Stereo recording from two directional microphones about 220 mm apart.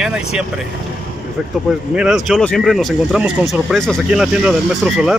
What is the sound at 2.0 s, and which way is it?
Speech, 5° right (ahead or behind).